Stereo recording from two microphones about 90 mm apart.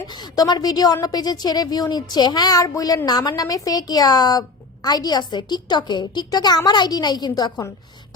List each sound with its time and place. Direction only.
0.1 s a woman's voice: 50° left (ahead or behind)